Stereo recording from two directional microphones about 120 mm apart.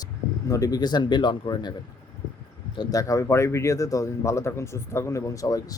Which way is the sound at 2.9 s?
25° left (ahead or behind).